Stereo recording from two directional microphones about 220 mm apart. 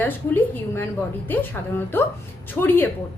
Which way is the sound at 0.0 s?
10° left (ahead or behind).